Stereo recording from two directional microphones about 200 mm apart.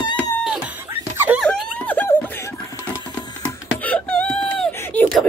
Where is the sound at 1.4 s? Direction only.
5° left (ahead or behind).